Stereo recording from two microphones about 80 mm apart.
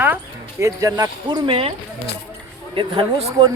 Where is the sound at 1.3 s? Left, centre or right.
Right.